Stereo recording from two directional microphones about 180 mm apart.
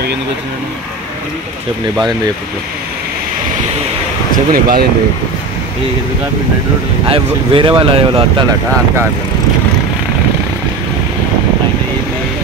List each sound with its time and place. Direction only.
4.3 s speech: 55° right (ahead or behind)
7.1 s speech: 30° right (ahead or behind)